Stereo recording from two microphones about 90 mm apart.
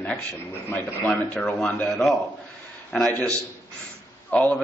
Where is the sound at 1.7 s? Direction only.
20° left (ahead or behind).